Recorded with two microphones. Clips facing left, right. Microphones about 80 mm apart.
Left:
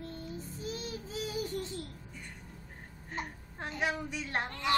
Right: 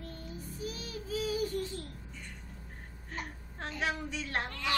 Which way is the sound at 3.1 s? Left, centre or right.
Centre.